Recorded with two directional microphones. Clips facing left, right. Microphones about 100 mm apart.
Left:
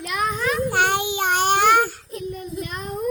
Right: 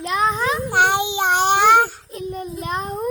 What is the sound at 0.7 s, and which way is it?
Child singing, 20° right (ahead or behind).